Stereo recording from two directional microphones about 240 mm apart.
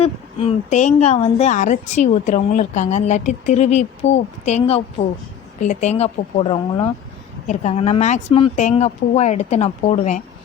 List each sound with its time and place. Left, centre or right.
0.0 s a woman's voice: left